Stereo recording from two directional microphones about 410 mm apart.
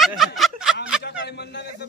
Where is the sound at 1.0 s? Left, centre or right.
Left.